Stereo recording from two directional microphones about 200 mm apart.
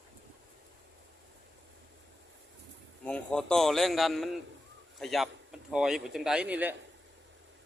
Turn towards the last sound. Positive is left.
turn(degrees=-5)  # may be behind; listen again after turning